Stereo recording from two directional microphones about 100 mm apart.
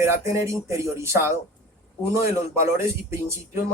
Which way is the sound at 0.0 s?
30° right (ahead or behind).